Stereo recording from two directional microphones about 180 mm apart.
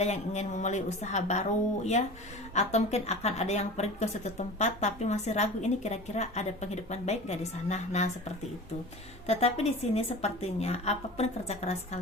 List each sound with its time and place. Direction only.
0.0 s a woman's voice: 40° left (ahead or behind)
9.2 s a woman's voice: 35° left (ahead or behind)